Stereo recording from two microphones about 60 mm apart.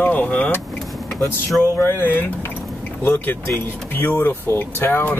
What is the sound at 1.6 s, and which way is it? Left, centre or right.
Speech, left.